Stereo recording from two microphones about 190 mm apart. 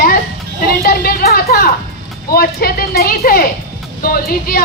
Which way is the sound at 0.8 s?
50° left (ahead or behind).